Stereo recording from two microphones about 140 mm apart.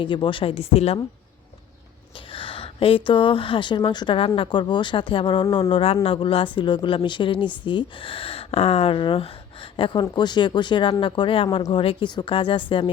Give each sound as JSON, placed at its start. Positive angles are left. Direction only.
{"t": 0.0, "sound": "speech", "side_deg": 35}
{"t": 2.3, "sound": "a woman's voice", "side_deg": 40}